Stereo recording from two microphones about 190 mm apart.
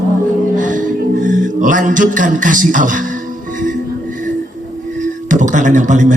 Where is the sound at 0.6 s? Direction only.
45° right (ahead or behind).